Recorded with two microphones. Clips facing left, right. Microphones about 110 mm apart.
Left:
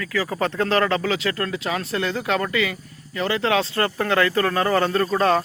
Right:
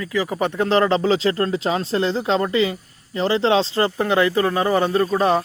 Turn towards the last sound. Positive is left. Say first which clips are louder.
# right 1 dB
turn(degrees=-15)  # may be behind; listen again after turning